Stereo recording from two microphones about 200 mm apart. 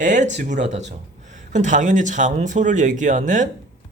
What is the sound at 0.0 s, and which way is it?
A man's voice, 40° right (ahead or behind).